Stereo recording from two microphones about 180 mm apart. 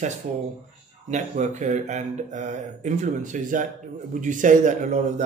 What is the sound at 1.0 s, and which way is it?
Speech, 40° right (ahead or behind).